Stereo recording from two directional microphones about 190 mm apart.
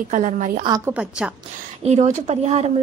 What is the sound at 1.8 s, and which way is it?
Speech, 35° right (ahead or behind).